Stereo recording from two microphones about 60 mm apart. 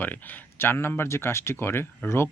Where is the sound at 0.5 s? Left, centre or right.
Left.